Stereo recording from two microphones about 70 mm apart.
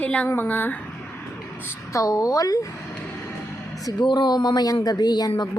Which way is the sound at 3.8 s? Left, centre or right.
Left.